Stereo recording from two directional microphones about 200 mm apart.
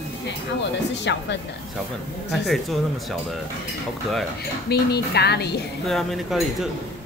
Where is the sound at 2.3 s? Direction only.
Centre (ahead or behind).